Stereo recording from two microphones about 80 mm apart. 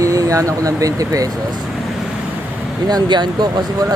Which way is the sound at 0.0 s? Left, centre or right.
Right.